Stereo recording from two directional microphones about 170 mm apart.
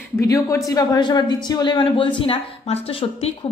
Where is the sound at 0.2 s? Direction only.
15° left (ahead or behind).